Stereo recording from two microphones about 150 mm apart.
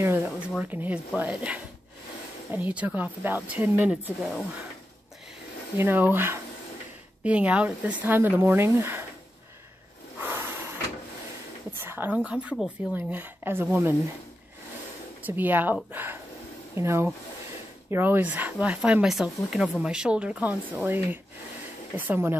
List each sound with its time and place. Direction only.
0.0 s a sound: 15° right (ahead or behind)
0.6 s speech: 10° right (ahead or behind)
5.8 s speech: 15° right (ahead or behind)
10.2 s vehicle: 15° right (ahead or behind)
11.8 s a sound: 15° right (ahead or behind)
12.3 s speech: 10° right (ahead or behind)
15.2 s speech: 10° right (ahead or behind)